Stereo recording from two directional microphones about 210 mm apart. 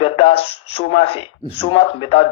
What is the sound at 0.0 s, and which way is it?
A man's voice, 25° left (ahead or behind).